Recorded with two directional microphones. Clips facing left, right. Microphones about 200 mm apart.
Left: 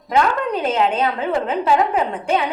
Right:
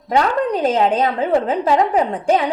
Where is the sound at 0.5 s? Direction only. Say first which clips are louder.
Right 4 dB; 35° right (ahead or behind).